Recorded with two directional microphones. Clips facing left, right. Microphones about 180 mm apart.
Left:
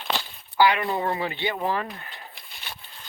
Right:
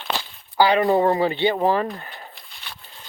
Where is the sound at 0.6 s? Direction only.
35° right (ahead or behind).